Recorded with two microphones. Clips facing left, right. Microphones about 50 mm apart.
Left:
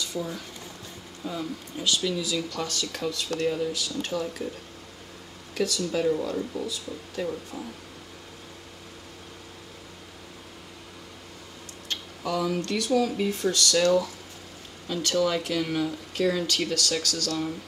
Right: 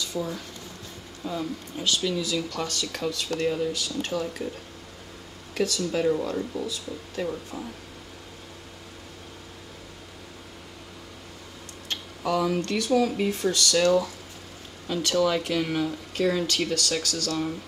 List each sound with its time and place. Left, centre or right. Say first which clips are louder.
0.2 s speech: right 2 dB; right
1.2 s speech: right 2 dB; centre
5.5 s speech: right 1 dB; centre
12.3 s speech: right 2 dB; centre